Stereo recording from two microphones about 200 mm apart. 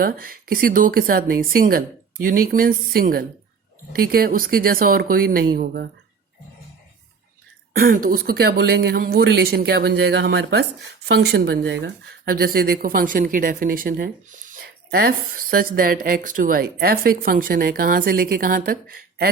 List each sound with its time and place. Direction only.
0.0 s speech: 45° right (ahead or behind)
7.8 s speech: 45° right (ahead or behind)
12.2 s speech: 50° right (ahead or behind)